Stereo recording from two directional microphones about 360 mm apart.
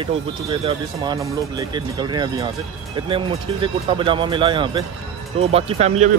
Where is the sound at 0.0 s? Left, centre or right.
Centre.